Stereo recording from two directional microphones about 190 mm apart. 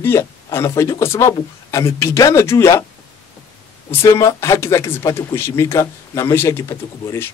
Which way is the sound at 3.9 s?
15° left (ahead or behind).